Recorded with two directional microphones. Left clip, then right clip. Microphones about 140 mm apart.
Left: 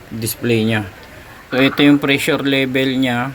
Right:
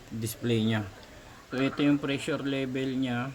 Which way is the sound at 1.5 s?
30° left (ahead or behind).